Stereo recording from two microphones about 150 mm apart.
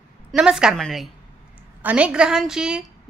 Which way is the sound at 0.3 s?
5° right (ahead or behind).